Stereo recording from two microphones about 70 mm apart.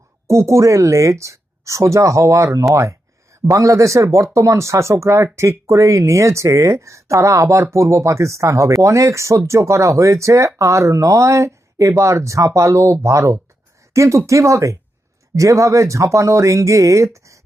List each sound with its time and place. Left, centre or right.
0.3 s speech: right